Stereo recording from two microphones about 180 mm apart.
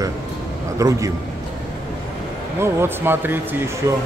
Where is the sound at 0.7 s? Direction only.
15° right (ahead or behind).